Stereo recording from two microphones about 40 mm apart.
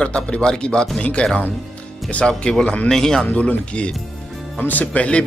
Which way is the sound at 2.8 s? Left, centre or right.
Centre.